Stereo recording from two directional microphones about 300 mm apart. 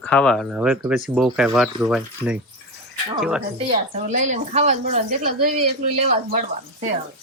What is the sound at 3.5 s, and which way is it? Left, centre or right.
A woman's voice, right.